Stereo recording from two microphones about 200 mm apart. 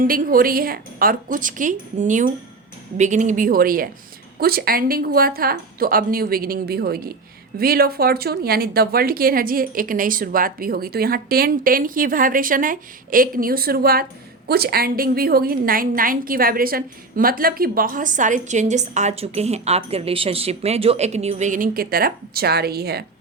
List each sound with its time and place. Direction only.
0.0 s a woman's voice: 45° right (ahead or behind)